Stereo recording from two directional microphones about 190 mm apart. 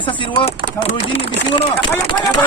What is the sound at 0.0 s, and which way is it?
Speech, 25° left (ahead or behind).